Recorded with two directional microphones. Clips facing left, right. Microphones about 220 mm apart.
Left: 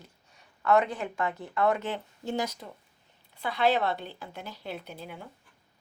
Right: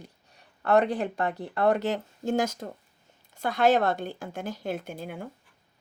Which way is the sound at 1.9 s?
45° right (ahead or behind).